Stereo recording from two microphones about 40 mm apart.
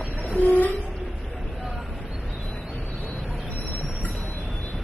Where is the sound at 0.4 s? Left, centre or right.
Left.